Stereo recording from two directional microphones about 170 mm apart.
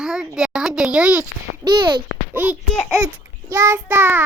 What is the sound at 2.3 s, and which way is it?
Child singing, 10° right (ahead or behind).